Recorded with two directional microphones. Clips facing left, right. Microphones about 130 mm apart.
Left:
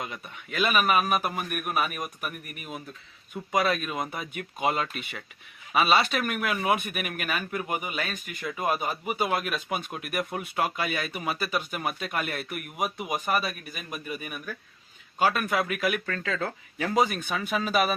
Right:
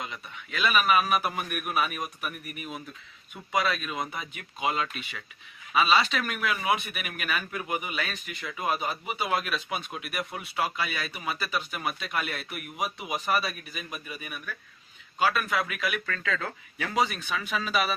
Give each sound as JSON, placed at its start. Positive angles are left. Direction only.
{"t": 0.0, "sound": "speech", "side_deg": 45}